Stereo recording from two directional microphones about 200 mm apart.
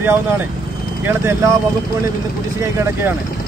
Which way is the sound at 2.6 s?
15° right (ahead or behind).